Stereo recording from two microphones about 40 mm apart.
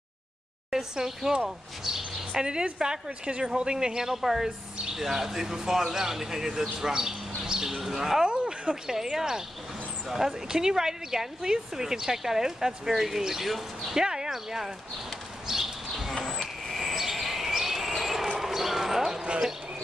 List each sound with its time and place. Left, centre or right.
0.7 s a woman's voice: centre
1.9 s chirp: centre
2.6 s a woman's voice: centre
8.3 s a sound: right
8.8 s speech: centre
13.9 s speech: centre
15.4 s bird flight: centre
16.3 s a sound: centre